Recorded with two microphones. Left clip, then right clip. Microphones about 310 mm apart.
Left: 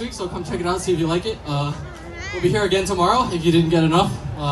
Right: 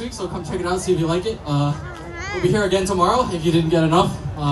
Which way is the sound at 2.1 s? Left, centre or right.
Right.